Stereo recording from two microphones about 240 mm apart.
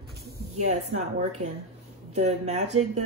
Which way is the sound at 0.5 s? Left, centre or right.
Right.